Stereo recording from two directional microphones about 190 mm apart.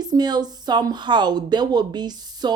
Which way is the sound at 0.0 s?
20° right (ahead or behind).